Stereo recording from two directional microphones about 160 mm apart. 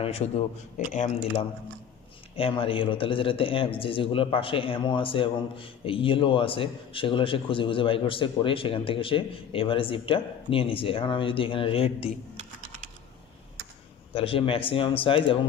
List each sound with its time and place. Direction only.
0.0 s a man's voice: 35° left (ahead or behind)
2.3 s a man's voice: 35° left (ahead or behind)
14.1 s a man's voice: 35° left (ahead or behind)